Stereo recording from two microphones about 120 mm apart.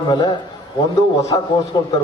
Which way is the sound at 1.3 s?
40° left (ahead or behind).